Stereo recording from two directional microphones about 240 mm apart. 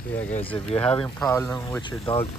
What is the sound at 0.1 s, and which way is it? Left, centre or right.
Speech, centre.